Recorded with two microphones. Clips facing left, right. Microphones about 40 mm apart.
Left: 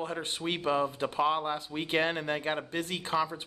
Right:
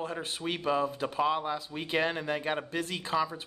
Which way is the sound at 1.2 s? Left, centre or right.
Left.